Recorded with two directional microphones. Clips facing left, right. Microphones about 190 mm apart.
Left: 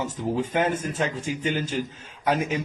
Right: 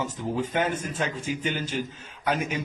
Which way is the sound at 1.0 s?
30° left (ahead or behind).